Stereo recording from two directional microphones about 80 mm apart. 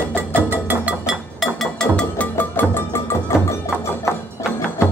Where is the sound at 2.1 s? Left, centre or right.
Left.